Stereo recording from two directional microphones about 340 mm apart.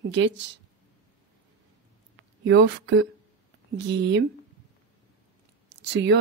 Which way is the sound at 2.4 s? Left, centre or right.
Right.